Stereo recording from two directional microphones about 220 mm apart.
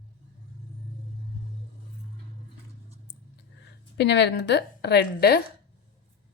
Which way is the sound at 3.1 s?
55° left (ahead or behind).